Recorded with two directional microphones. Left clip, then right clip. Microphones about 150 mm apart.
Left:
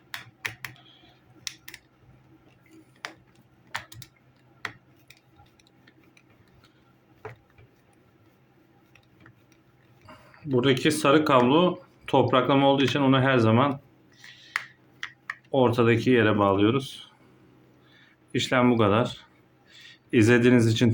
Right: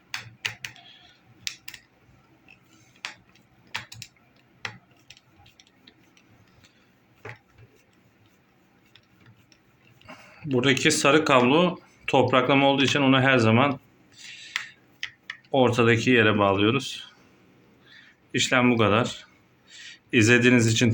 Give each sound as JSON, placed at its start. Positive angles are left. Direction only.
{"t": 0.9, "sound": "computer keyboard", "side_deg": 20}
{"t": 10.1, "sound": "speech", "side_deg": 10}
{"t": 14.2, "sound": "a sound", "side_deg": 10}
{"t": 15.4, "sound": "speech", "side_deg": 10}